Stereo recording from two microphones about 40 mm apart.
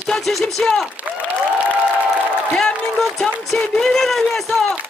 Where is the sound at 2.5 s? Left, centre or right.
Centre.